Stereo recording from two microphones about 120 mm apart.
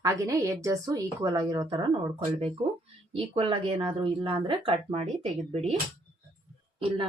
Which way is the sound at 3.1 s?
45° right (ahead or behind).